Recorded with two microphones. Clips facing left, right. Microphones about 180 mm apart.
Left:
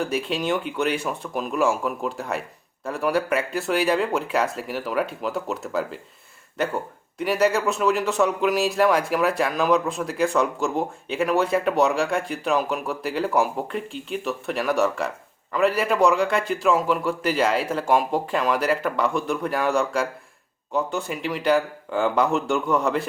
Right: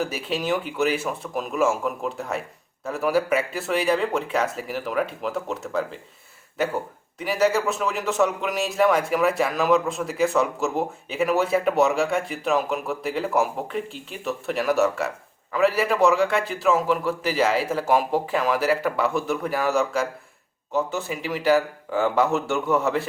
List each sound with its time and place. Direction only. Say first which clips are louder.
0.0 s a man's voice: left 2 dB; centre (ahead or behind)